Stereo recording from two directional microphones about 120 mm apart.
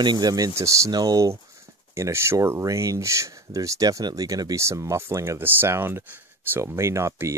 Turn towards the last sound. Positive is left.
turn(degrees=-25)  # may be behind; listen again after turning